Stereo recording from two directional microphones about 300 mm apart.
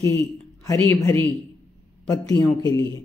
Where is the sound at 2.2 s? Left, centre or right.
Centre.